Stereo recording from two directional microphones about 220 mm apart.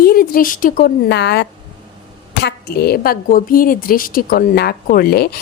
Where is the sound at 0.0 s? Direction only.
40° left (ahead or behind).